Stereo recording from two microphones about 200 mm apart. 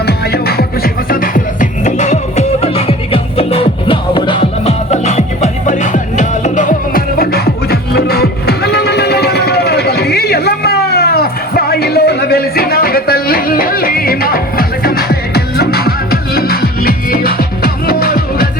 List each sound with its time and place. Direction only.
1.1 s music: 45° left (ahead or behind)